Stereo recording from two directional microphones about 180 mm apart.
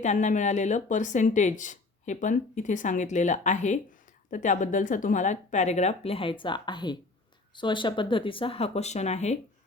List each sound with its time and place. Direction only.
0.0 s speech: 40° left (ahead or behind)